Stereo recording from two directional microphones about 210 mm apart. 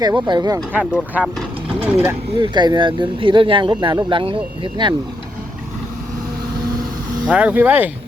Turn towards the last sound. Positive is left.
turn(degrees=-10)  # may be behind; listen again after turning